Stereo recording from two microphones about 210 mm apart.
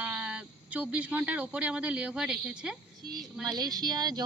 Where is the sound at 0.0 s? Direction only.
5° right (ahead or behind).